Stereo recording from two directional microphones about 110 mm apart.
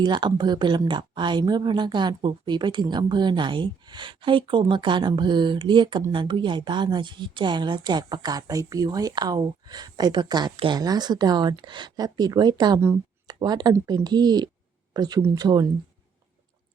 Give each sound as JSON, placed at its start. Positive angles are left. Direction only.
{"t": 0.0, "sound": "speech", "side_deg": -45}